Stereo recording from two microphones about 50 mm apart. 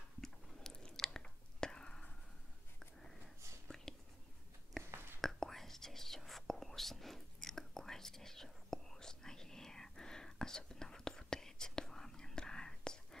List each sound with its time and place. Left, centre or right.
0.2 s chewing: centre
1.2 s whispering: centre
3.6 s whispering: centre